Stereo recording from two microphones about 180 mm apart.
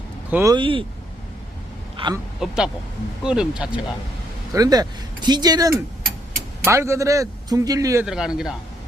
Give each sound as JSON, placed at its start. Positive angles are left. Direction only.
{"t": 0.3, "sound": "speech", "side_deg": -10}
{"t": 0.5, "sound": "speech", "side_deg": -30}
{"t": 2.0, "sound": "speech", "side_deg": -30}
{"t": 2.4, "sound": "a man's voice", "side_deg": 0}
{"t": 4.5, "sound": "speech", "side_deg": -20}
{"t": 5.7, "sound": "tick-tock", "side_deg": -55}
{"t": 6.7, "sound": "speech", "side_deg": -15}
{"t": 8.0, "sound": "a man's voice", "side_deg": -5}